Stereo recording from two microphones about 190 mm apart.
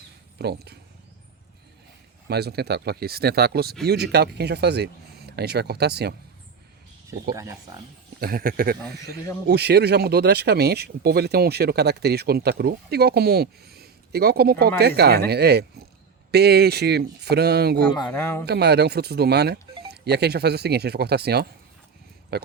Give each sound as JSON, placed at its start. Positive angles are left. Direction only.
{"t": 0.3, "sound": "speech", "side_deg": -60}
{"t": 2.2, "sound": "speech", "side_deg": -60}
{"t": 7.3, "sound": "speech", "side_deg": -15}
{"t": 8.2, "sound": "speech", "side_deg": -50}
{"t": 18.0, "sound": "speech", "side_deg": 10}
{"t": 18.4, "sound": "speech", "side_deg": -60}